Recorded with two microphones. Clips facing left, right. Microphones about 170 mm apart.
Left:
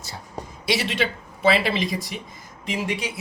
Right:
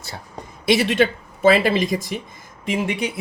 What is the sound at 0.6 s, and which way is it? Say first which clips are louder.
Speech: right 7 dB; 55° right (ahead or behind).